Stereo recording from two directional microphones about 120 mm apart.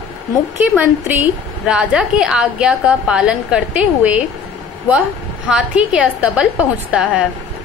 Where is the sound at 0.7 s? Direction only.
10° right (ahead or behind).